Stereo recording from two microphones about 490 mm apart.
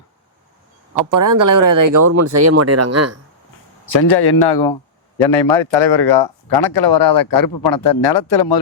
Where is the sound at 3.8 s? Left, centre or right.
Left.